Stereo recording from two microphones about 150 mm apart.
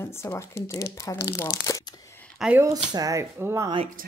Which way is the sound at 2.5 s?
25° right (ahead or behind).